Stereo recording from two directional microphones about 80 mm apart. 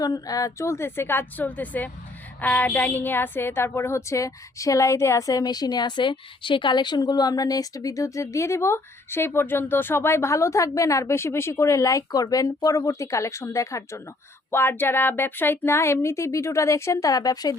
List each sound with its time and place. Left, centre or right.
0.0 s a woman's voice: left
5.4 s a woman's voice: left